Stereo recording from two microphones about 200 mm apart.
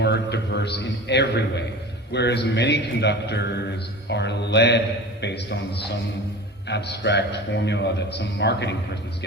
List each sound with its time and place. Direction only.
0.0 s a man's voice: 60° left (ahead or behind)